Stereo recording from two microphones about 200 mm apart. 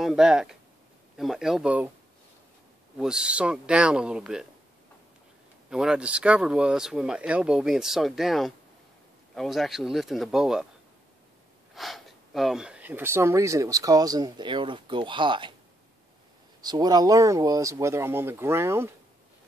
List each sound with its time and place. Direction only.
0.0 s speech: 5° right (ahead or behind)
3.0 s speech: 5° right (ahead or behind)
5.7 s speech: 5° right (ahead or behind)
11.7 s speech: centre (ahead or behind); by 15.5 s 25° right (ahead or behind)
16.6 s speech: 20° right (ahead or behind)